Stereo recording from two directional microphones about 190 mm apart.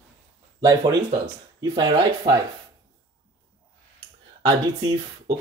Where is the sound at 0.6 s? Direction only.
20° right (ahead or behind).